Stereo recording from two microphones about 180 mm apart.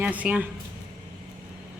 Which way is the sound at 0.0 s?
5° right (ahead or behind).